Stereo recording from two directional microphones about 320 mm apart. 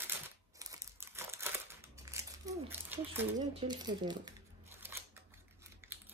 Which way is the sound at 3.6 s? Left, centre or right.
Centre.